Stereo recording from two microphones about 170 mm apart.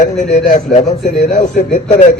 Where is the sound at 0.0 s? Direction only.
45° left (ahead or behind).